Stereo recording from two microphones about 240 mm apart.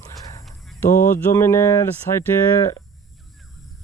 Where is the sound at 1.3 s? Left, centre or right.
Centre.